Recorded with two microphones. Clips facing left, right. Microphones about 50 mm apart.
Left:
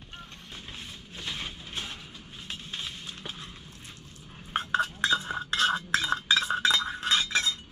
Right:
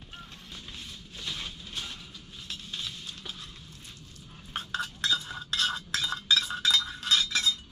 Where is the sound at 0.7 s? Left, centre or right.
Left.